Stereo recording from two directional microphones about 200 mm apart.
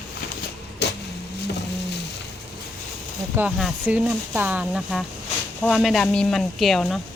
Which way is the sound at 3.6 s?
5° right (ahead or behind).